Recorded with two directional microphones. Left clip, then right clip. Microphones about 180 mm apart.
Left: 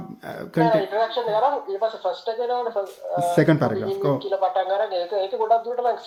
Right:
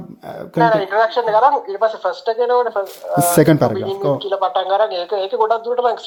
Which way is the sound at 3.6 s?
20° right (ahead or behind).